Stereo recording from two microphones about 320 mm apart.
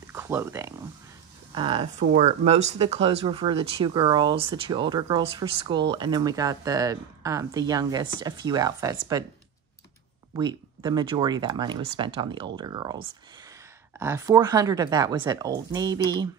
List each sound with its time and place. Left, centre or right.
0.0 s a sound: centre
1.5 s speech: centre
10.3 s speech: centre